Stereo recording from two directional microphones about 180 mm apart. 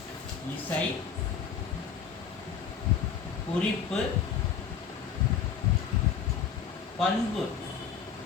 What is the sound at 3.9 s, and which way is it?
Speech, 5° left (ahead or behind).